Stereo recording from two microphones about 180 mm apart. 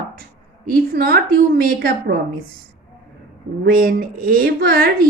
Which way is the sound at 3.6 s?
55° right (ahead or behind).